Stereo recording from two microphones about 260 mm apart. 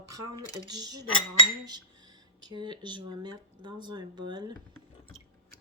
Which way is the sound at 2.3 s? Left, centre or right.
Centre.